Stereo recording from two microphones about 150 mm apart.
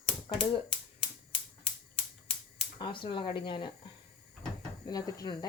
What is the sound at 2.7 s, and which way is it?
Speech, 35° left (ahead or behind).